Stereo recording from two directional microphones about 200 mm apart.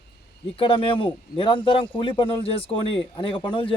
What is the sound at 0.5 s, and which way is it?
Speech, 25° left (ahead or behind).